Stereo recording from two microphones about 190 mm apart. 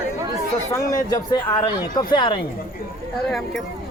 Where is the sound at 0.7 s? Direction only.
20° left (ahead or behind).